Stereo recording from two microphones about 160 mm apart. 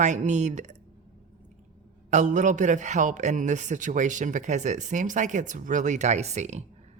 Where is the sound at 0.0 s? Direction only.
50° right (ahead or behind).